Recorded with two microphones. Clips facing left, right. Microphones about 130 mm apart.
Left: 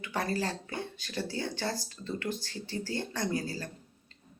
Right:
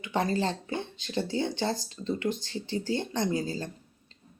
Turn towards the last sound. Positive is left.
turn(degrees=-20)  # may be behind; listen again after turning